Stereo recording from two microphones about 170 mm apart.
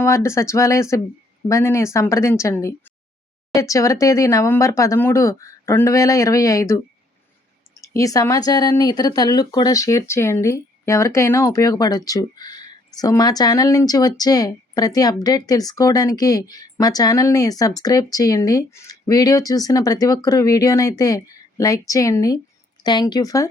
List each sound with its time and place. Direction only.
0.0 s a woman's voice: 15° left (ahead or behind)